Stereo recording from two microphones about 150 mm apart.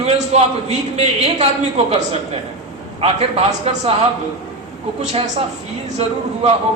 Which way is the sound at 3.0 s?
45° right (ahead or behind).